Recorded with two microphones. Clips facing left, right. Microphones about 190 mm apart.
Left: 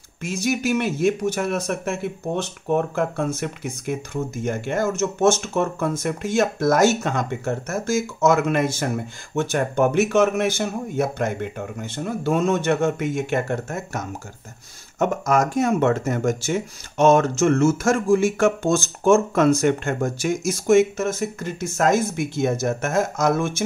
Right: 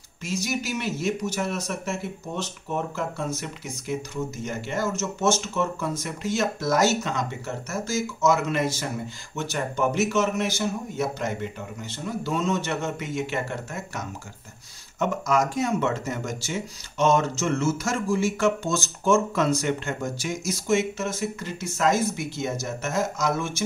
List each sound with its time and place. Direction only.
0.2 s speech: 55° left (ahead or behind)